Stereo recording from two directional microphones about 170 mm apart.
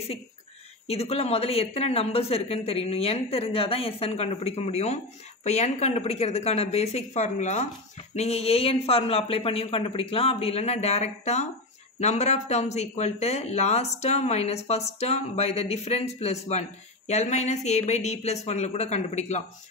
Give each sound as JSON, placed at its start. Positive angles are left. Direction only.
{"t": 0.8, "sound": "speech", "side_deg": 35}